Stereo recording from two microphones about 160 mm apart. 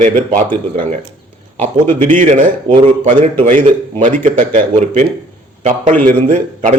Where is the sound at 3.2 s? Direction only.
50° right (ahead or behind).